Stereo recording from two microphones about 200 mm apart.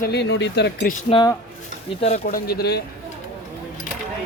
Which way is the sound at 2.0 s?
30° left (ahead or behind).